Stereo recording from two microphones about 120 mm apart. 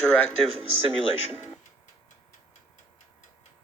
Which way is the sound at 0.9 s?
60° left (ahead or behind).